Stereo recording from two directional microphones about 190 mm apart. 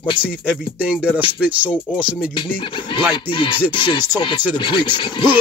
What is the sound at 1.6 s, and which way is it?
Speech, 10° left (ahead or behind).